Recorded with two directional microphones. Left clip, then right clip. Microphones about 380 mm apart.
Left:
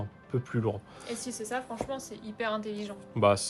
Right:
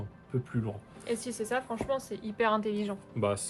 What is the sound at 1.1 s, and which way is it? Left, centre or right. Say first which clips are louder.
A woman's voice: right 3 dB; centre.